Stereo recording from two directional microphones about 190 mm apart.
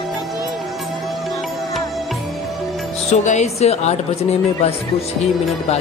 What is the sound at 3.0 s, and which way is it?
A woman's voice, 35° left (ahead or behind).